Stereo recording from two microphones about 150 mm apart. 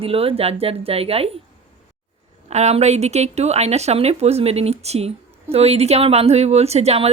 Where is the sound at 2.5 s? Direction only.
50° right (ahead or behind).